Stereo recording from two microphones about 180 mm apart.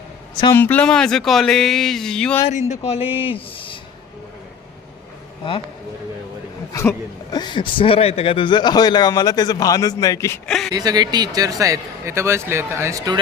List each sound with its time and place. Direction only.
0.5 s speech: 10° left (ahead or behind)
2.5 s speech: 40° left (ahead or behind)
6.7 s a man's voice: 20° left (ahead or behind)
10.4 s speech: centre (ahead or behind)
10.7 s speech: 20° right (ahead or behind)